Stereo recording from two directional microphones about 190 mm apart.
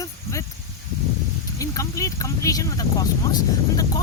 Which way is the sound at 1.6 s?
15° left (ahead or behind).